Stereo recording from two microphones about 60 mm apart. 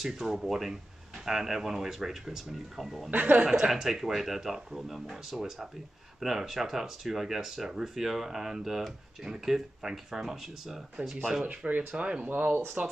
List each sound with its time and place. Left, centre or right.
0.0 s speech: centre
3.1 s speech: right
3.4 s speech: centre
11.0 s speech: right